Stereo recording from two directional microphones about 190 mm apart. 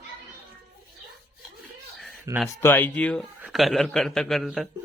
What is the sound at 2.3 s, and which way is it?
Speech, 15° right (ahead or behind).